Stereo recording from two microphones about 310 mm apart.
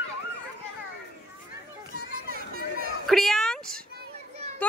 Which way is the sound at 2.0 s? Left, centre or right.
Right.